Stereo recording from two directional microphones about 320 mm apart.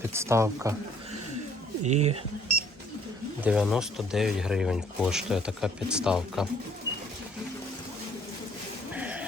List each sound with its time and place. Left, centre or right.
0.1 s speech: centre
1.8 s speech: right
3.4 s speech: centre
8.9 s a sound: centre